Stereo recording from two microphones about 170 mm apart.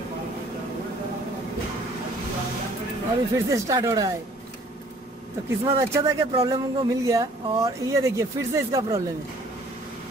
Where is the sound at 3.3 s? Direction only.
20° right (ahead or behind).